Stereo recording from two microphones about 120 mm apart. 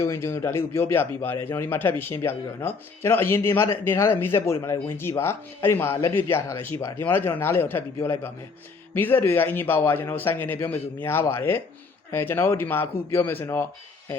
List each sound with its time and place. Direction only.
0.0 s a man's voice: 25° left (ahead or behind)